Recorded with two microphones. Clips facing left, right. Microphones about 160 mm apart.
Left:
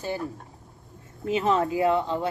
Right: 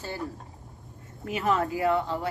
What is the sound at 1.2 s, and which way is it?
Speech, 25° left (ahead or behind).